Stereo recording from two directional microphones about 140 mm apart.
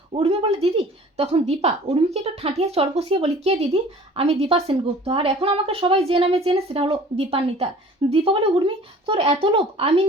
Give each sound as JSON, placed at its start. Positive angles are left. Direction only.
{"t": 0.1, "sound": "speech", "side_deg": -45}